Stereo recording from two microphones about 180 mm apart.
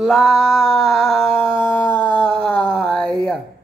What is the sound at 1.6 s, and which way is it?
Howl, 10° left (ahead or behind).